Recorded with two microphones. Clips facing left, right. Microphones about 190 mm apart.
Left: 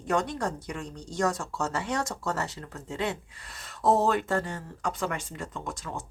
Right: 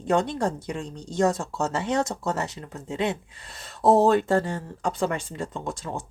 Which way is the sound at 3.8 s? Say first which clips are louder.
Right 6 dB; 30° right (ahead or behind).